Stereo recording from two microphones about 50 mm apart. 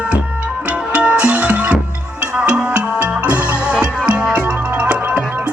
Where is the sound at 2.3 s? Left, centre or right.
Centre.